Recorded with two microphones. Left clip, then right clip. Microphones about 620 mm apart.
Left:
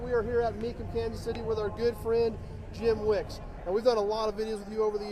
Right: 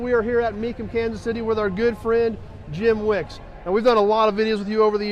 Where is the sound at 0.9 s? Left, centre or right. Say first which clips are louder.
Right 10 dB; right.